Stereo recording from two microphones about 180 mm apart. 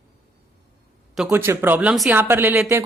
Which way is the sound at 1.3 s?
15° right (ahead or behind).